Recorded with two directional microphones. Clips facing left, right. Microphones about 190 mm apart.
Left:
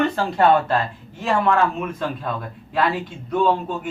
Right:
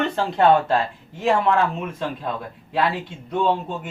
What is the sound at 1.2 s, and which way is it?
Speech, 20° right (ahead or behind).